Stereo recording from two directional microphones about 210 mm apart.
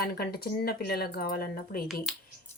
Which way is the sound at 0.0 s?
45° left (ahead or behind).